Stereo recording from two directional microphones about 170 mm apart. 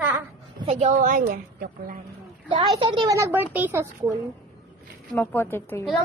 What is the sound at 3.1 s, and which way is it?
Speech, 15° right (ahead or behind).